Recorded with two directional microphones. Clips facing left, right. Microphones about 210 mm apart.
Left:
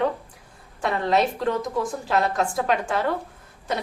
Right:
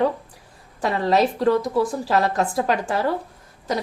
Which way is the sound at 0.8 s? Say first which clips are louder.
Right 3 dB; 35° right (ahead or behind).